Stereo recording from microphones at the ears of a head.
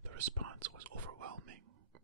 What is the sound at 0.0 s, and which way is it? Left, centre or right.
Whispering, right.